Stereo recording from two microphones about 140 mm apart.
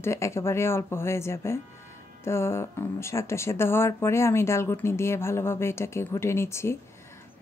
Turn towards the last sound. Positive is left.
turn(degrees=20)  # may be behind; listen again after turning